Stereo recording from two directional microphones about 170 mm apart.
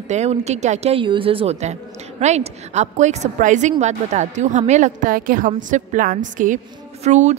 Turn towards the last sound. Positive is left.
turn(degrees=-40)  # may be behind; listen again after turning